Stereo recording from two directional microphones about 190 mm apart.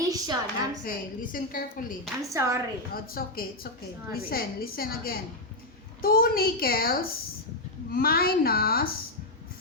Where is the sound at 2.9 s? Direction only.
50° left (ahead or behind).